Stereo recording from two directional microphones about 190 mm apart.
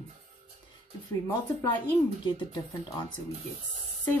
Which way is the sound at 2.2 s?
25° left (ahead or behind).